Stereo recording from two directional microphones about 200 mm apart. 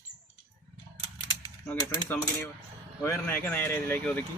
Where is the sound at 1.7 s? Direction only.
10° left (ahead or behind).